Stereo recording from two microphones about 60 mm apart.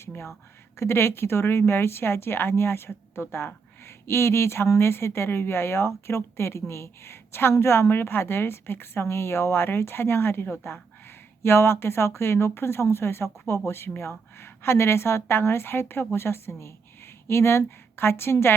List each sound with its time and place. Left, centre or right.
0.8 s a woman's voice: left